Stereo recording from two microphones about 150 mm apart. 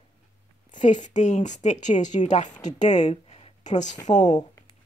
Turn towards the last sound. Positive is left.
turn(degrees=55)  # may be behind; listen again after turning